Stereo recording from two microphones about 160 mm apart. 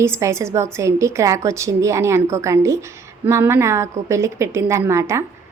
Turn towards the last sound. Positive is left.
turn(degrees=-15)  # may be behind; listen again after turning